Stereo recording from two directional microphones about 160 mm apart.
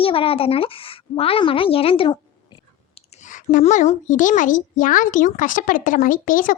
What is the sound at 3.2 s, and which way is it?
A woman's voice, 55° left (ahead or behind).